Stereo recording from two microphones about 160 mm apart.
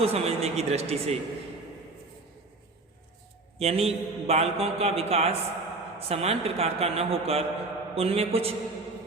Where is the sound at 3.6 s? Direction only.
40° right (ahead or behind).